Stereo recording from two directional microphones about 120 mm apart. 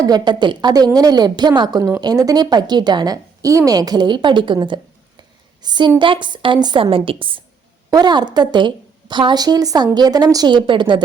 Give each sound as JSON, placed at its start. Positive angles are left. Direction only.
{"t": 0.0, "sound": "a woman's voice", "side_deg": -35}
{"t": 7.9, "sound": "a woman's voice", "side_deg": -35}